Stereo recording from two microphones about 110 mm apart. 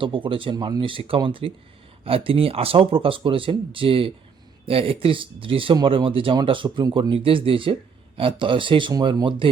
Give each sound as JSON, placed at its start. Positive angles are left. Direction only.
{"t": 0.0, "sound": "speech", "side_deg": -50}
{"t": 0.5, "sound": "speech", "side_deg": -35}
{"t": 0.8, "sound": "speech", "side_deg": -55}
{"t": 8.9, "sound": "speech", "side_deg": -35}